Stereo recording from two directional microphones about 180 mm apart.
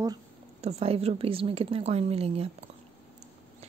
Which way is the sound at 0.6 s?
35° right (ahead or behind).